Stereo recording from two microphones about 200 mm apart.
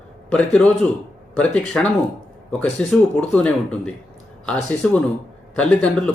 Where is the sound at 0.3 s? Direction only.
5° left (ahead or behind).